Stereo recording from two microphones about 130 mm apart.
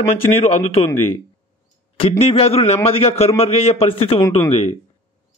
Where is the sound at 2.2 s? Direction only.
50° left (ahead or behind).